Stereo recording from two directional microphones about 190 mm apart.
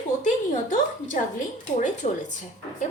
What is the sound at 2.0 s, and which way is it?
Speech, 35° left (ahead or behind).